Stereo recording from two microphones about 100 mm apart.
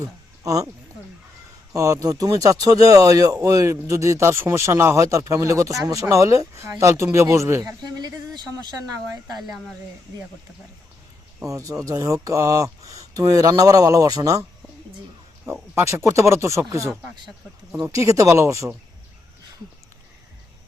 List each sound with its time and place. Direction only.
0.0 s a sound: 35° right (ahead or behind)
1.7 s speech: 35° right (ahead or behind)
11.4 s speech: 35° right (ahead or behind)
15.7 s speech: 25° right (ahead or behind)
16.9 s speech: 5° right (ahead or behind)
17.9 s speech: 30° right (ahead or behind)